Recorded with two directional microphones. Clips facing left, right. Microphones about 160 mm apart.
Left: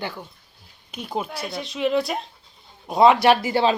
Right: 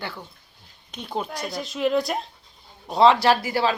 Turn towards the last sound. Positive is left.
turn(degrees=25)  # may be behind; listen again after turning